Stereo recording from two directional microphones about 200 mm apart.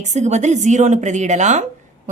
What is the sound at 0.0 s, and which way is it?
A woman's voice, 35° right (ahead or behind).